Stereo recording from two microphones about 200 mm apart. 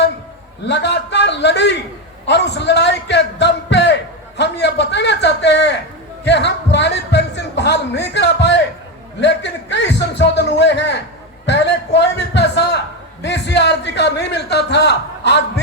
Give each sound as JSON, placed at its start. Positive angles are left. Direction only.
{"t": 0.6, "sound": "speech", "side_deg": 60}
{"t": 2.2, "sound": "music", "side_deg": 60}
{"t": 9.2, "sound": "speech", "side_deg": 60}